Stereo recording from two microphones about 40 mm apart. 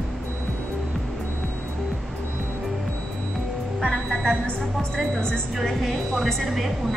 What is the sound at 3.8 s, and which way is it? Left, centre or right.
Music, left.